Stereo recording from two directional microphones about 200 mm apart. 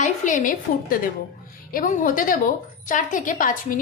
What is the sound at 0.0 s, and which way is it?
A woman's voice, 40° left (ahead or behind).